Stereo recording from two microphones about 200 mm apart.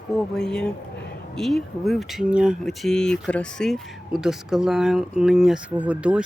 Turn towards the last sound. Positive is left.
turn(degrees=-5)  # may be behind; listen again after turning